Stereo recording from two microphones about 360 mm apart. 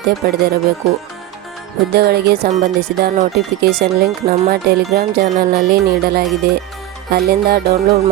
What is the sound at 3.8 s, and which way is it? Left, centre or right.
Speech, right.